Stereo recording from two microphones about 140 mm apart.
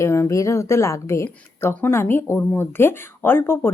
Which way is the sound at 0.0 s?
20° left (ahead or behind).